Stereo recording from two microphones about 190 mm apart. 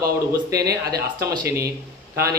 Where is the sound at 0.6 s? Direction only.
55° right (ahead or behind).